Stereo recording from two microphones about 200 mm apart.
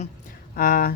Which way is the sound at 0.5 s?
45° left (ahead or behind).